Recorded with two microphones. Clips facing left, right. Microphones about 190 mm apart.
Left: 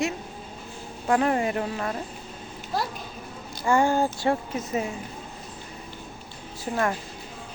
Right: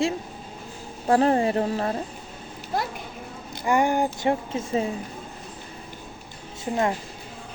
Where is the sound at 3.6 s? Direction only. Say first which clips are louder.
Even; 15° right (ahead or behind).